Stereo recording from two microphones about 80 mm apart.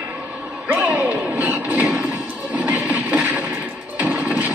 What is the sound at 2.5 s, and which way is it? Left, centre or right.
Train, centre.